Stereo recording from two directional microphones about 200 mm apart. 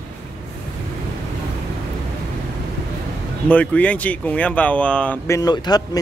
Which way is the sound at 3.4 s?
5° left (ahead or behind).